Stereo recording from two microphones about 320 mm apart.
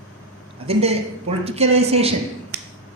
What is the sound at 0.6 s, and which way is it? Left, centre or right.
A woman's voice, centre.